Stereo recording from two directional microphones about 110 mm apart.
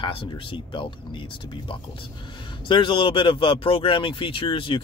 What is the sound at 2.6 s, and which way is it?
Speech, 50° left (ahead or behind).